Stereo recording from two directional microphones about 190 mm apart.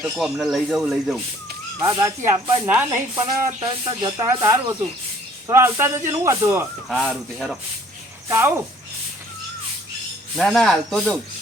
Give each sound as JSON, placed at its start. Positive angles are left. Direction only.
{"t": 0.0, "sound": "speech", "side_deg": 0}
{"t": 1.8, "sound": "speech", "side_deg": -20}
{"t": 3.6, "sound": "speech", "side_deg": -25}
{"t": 6.8, "sound": "speech", "side_deg": 0}
{"t": 8.3, "sound": "speech", "side_deg": -15}
{"t": 10.3, "sound": "speech", "side_deg": 0}